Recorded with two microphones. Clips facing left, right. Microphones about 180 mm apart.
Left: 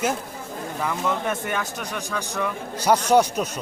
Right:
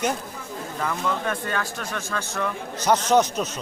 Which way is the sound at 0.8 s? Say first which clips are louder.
Left 1 dB; 15° left (ahead or behind).